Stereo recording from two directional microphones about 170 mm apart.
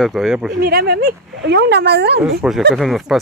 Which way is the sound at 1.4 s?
85° right.